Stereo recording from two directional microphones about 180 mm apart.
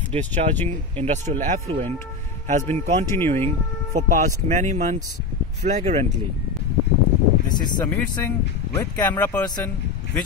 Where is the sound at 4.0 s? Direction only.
40° right (ahead or behind).